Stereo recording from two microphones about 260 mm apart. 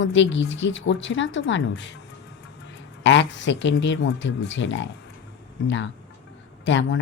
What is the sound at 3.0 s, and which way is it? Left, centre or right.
Speech, left.